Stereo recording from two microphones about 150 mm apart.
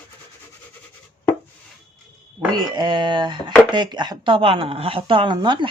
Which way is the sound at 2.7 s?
30° right (ahead or behind).